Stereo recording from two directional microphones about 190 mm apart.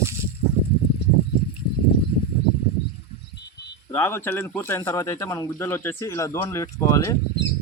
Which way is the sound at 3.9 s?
10° left (ahead or behind).